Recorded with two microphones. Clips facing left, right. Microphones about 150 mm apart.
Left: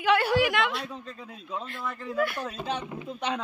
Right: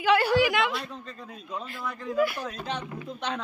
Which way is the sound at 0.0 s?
Centre (ahead or behind).